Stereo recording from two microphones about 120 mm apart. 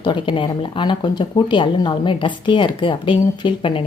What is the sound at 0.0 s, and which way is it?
Speech, 45° left (ahead or behind).